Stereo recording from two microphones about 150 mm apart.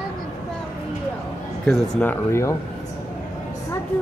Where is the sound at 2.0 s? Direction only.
15° left (ahead or behind).